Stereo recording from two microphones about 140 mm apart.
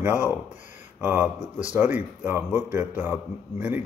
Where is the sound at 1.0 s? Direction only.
15° right (ahead or behind).